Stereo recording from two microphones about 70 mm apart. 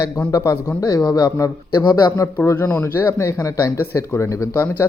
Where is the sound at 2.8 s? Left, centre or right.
Left.